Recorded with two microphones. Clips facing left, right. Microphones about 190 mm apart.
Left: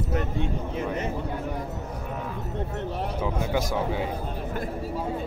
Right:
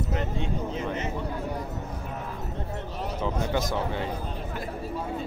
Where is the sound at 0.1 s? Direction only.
55° left (ahead or behind).